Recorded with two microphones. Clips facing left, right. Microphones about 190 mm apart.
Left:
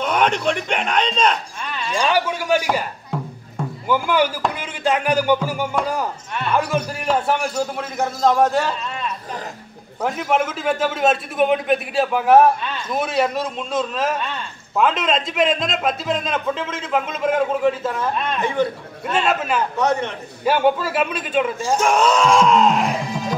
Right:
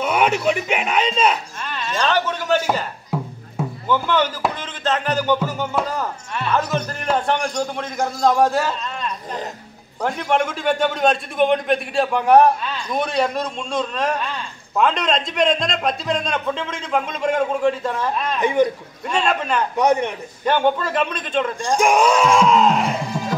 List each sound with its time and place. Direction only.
0.0 s speech: 5° right (ahead or behind)
2.0 s a man's voice: 10° left (ahead or behind)
3.1 s music: 5° right (ahead or behind)
3.6 s a sound: 5° right (ahead or behind)
3.9 s a man's voice: 10° left (ahead or behind)
18.4 s a man's voice: 15° right (ahead or behind)
19.0 s a man's voice: 5° left (ahead or behind)
19.8 s a man's voice: 15° right (ahead or behind)
20.4 s a man's voice: 5° left (ahead or behind)
21.7 s speech: 15° right (ahead or behind)